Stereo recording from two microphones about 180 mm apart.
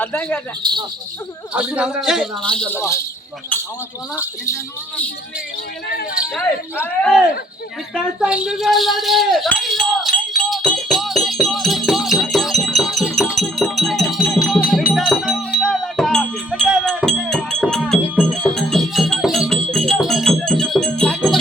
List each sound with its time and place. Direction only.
0.0 s speech: 10° left (ahead or behind)
0.6 s speech: 25° right (ahead or behind)
1.5 s a man's voice: 5° right (ahead or behind); by 3.0 s 15° left (ahead or behind)
6.1 s a man's voice: 5° right (ahead or behind)
7.9 s a sound: 5° right (ahead or behind)